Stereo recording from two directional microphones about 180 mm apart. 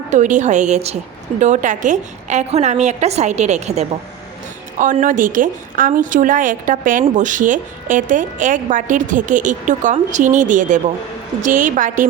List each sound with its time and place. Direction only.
0.1 s a woman's voice: 40° right (ahead or behind)